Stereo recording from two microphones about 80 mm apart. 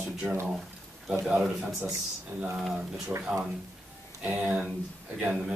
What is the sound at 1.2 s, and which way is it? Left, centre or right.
A man's voice, centre.